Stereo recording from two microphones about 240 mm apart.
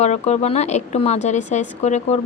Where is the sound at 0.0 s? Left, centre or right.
Left.